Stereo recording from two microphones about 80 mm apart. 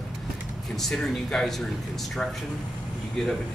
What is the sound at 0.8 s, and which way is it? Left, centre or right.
Speech, centre.